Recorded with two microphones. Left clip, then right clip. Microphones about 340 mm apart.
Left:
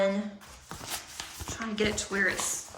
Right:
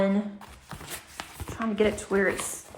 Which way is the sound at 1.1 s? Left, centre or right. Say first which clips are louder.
Right 2 dB; centre.